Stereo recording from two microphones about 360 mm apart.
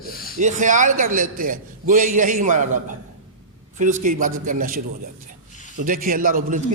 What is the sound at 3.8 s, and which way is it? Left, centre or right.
A man's voice, right.